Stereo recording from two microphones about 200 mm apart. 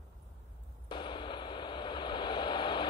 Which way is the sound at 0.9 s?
25° left (ahead or behind).